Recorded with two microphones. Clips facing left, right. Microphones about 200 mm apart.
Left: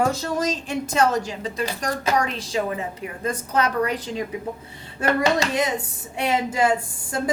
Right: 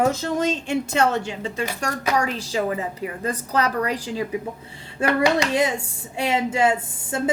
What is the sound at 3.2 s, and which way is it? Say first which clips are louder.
A woman's voice: left 1 dB; 35° right (ahead or behind).